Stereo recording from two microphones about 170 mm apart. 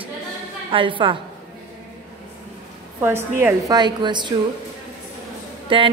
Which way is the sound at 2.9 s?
15° right (ahead or behind).